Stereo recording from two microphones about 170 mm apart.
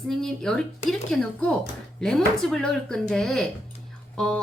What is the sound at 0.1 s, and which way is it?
Speech, 5° left (ahead or behind).